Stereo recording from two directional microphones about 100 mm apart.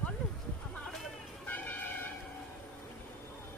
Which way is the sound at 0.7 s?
5° left (ahead or behind).